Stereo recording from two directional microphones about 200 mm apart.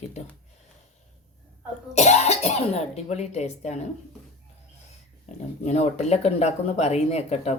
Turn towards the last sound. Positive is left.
turn(degrees=35)  # may be behind; listen again after turning